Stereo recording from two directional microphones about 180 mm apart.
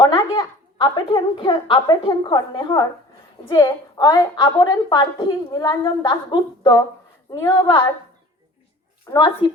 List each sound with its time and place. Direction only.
0.0 s a woman's voice: 25° left (ahead or behind)
9.0 s a woman's voice: 25° left (ahead or behind)